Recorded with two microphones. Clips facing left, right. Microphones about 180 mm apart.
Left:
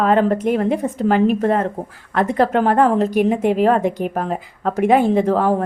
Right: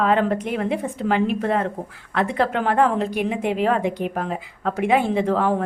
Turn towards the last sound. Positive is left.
turn(degrees=40)  # may be behind; listen again after turning